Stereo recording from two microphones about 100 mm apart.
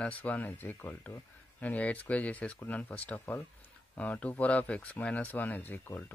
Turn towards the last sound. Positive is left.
turn(degrees=20)  # may be behind; listen again after turning